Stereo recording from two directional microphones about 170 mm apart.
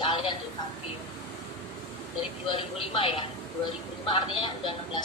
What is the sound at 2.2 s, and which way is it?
A woman's voice, 35° left (ahead or behind).